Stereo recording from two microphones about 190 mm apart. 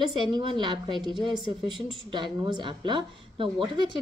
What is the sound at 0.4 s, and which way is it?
A woman's voice, 25° right (ahead or behind).